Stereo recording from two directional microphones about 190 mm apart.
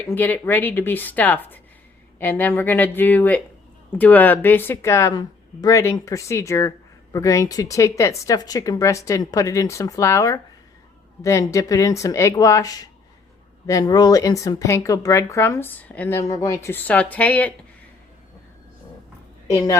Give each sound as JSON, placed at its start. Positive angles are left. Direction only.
{"t": 0.0, "sound": "speech", "side_deg": 10}
{"t": 19.5, "sound": "speech", "side_deg": 15}